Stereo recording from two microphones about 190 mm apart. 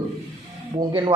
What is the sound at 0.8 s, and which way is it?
Speech, 20° right (ahead or behind).